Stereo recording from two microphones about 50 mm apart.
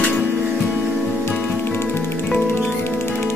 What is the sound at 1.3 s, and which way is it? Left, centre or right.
Music, left.